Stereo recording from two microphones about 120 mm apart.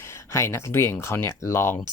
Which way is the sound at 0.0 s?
25° left (ahead or behind).